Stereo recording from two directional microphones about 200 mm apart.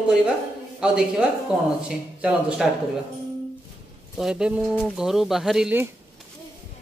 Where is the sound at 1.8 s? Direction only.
5° right (ahead or behind).